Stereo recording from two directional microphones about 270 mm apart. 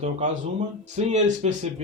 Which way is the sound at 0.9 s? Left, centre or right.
Right.